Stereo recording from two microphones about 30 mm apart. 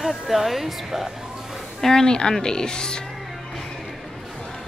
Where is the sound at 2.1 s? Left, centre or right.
Left.